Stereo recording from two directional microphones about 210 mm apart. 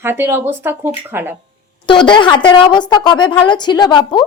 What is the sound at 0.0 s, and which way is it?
Speech, 10° right (ahead or behind).